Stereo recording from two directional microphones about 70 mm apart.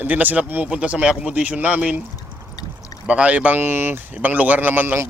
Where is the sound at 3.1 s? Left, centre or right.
Centre.